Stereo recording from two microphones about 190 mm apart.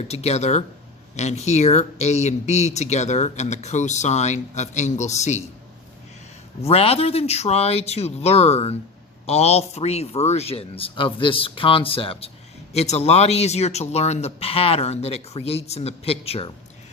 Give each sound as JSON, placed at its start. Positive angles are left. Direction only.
{"t": 0.1, "sound": "speech", "side_deg": 35}
{"t": 6.6, "sound": "speech", "side_deg": 30}